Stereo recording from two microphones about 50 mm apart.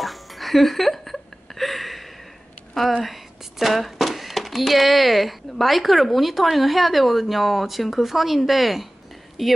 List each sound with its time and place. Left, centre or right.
0.0 s music: centre
3.0 s speech: centre